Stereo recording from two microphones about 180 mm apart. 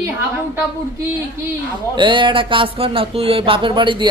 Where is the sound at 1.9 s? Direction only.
25° right (ahead or behind).